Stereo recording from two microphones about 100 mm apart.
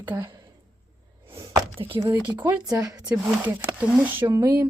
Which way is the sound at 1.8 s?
55° right (ahead or behind).